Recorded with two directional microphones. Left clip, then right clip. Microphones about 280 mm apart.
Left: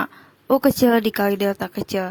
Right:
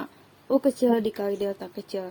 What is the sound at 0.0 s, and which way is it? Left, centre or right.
Speech, left.